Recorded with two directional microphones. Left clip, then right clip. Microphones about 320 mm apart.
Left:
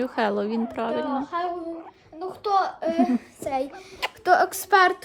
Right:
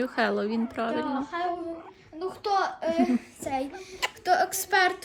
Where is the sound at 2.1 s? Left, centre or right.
Left.